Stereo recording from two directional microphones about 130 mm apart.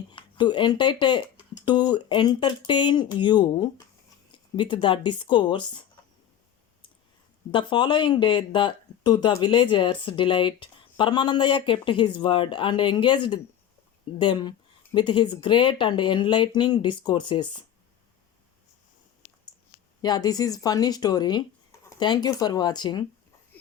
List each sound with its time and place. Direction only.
0.1 s speech: 35° left (ahead or behind)
7.5 s speech: 40° left (ahead or behind)
20.0 s speech: 30° left (ahead or behind)